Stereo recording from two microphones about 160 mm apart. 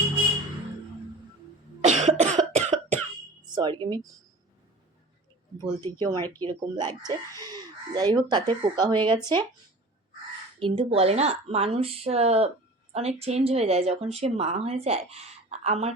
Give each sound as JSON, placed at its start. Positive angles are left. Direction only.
{"t": 1.8, "sound": "cough", "side_deg": -45}
{"t": 3.5, "sound": "speech", "side_deg": -30}
{"t": 5.8, "sound": "speech", "side_deg": -25}
{"t": 6.2, "sound": "speech", "side_deg": 10}
{"t": 6.7, "sound": "speech", "side_deg": -25}
{"t": 10.6, "sound": "speech", "side_deg": -35}